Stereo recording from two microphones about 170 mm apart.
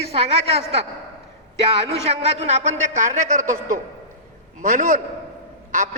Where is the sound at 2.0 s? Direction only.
40° right (ahead or behind).